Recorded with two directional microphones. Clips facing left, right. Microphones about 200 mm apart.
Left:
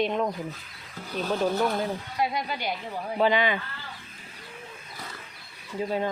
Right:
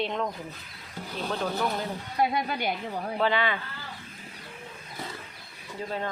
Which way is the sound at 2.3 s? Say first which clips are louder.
Right 2 dB; 50° right (ahead or behind).